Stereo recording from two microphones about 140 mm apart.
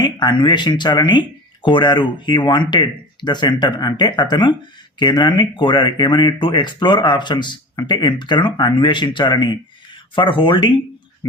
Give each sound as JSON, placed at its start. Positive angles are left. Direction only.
{"t": 0.0, "sound": "speech", "side_deg": 30}